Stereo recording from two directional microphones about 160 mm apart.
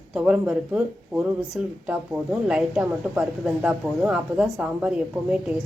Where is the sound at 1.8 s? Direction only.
5° right (ahead or behind).